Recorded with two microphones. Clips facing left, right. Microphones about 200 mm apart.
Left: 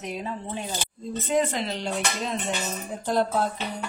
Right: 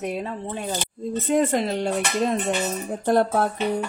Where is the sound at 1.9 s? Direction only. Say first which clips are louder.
Right 6 dB; 50° right (ahead or behind).